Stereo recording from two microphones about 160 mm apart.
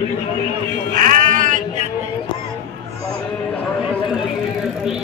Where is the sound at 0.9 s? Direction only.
55° right (ahead or behind).